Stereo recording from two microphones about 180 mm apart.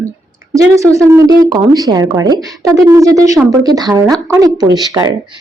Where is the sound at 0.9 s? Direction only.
15° right (ahead or behind).